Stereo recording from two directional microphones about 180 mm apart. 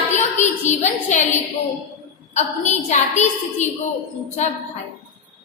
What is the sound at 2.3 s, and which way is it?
A woman's voice, 40° left (ahead or behind).